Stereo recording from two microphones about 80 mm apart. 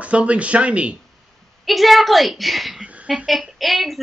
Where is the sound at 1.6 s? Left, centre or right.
Centre.